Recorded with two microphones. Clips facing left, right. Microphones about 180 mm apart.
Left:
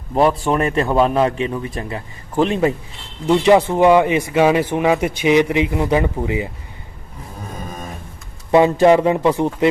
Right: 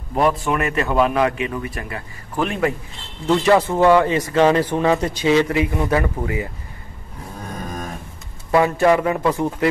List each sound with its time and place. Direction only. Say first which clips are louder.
0.1 s a man's voice: left 3 dB; 30° left (ahead or behind)
8.5 s a man's voice: left 4 dB; 25° left (ahead or behind)